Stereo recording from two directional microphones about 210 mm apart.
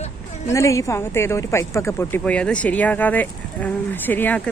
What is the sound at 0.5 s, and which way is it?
Speech, 15° left (ahead or behind).